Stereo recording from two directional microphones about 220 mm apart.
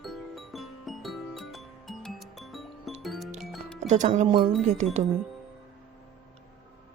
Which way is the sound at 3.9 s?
30° right (ahead or behind).